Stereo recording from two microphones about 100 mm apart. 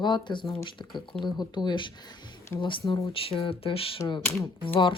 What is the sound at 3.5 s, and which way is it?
Speech, 70° left (ahead or behind).